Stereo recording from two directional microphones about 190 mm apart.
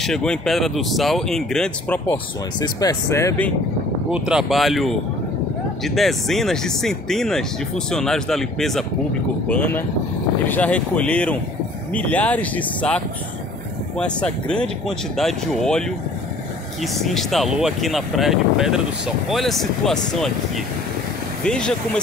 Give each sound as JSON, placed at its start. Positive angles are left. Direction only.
{"t": 0.0, "sound": "speech", "side_deg": 5}
{"t": 2.6, "sound": "speech", "side_deg": 20}
{"t": 4.1, "sound": "speech", "side_deg": -5}
{"t": 16.8, "sound": "speech", "side_deg": 0}